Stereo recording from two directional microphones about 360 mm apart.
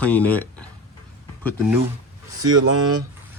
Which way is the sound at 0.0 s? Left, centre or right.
Centre.